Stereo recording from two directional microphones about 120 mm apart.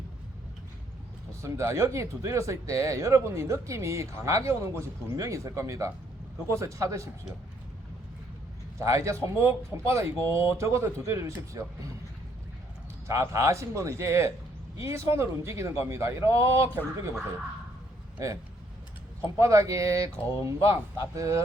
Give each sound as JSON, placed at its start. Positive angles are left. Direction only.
{"t": 1.4, "sound": "speech", "side_deg": -25}
{"t": 8.8, "sound": "speech", "side_deg": -25}
{"t": 13.1, "sound": "speech", "side_deg": -25}
{"t": 19.2, "sound": "speech", "side_deg": -25}